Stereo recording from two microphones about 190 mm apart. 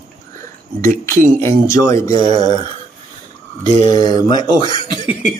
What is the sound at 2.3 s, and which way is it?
Speech, 35° right (ahead or behind).